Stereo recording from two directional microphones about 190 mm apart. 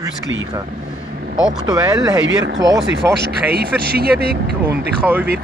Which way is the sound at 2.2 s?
75° right (ahead or behind).